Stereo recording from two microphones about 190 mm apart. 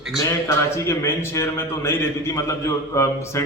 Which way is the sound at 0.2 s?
15° left (ahead or behind).